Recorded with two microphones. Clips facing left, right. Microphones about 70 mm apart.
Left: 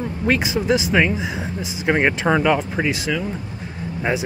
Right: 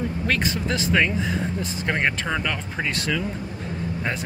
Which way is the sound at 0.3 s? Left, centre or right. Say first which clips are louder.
Left 8 dB; centre.